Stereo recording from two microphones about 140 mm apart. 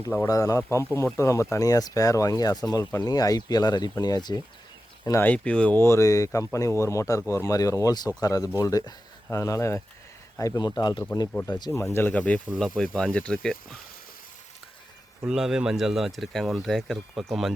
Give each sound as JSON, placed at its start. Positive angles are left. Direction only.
{"t": 0.3, "sound": "speech", "side_deg": 25}
{"t": 5.2, "sound": "speech", "side_deg": 10}
{"t": 11.3, "sound": "speech", "side_deg": 10}
{"t": 11.5, "sound": "speech", "side_deg": 25}
{"t": 15.2, "sound": "speech", "side_deg": -5}